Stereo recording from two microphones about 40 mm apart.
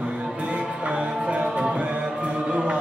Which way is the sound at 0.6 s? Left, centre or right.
Right.